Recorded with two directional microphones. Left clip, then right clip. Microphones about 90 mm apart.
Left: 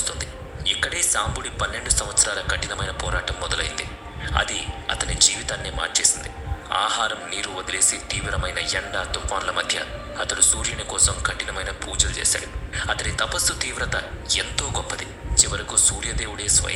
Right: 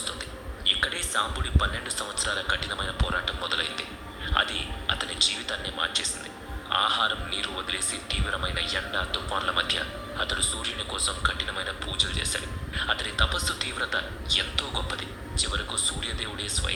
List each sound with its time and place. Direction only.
0.6 s a man's voice: 35° left (ahead or behind)